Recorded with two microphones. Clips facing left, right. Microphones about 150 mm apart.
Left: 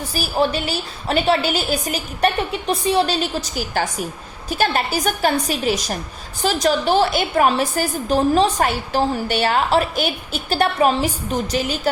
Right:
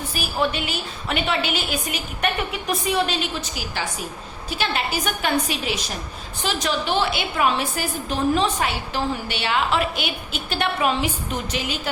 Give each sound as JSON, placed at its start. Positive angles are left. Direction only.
{"t": 0.1, "sound": "a woman's voice", "side_deg": 35}